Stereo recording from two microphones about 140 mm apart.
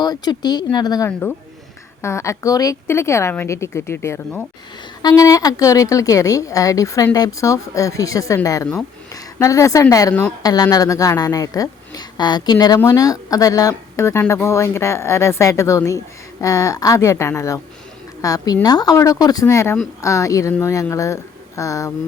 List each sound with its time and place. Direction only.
0.0 s a woman's voice: 30° left (ahead or behind)